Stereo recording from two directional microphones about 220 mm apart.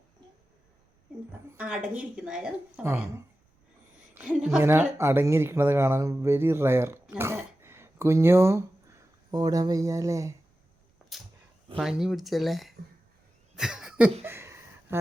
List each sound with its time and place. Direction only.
1.5 s speech: 5° right (ahead or behind)
4.1 s speech: 5° right (ahead or behind)
11.1 s a sound: centre (ahead or behind)
11.8 s speech: centre (ahead or behind)
13.6 s cough: 5° right (ahead or behind)
14.3 s a sound: 10° right (ahead or behind)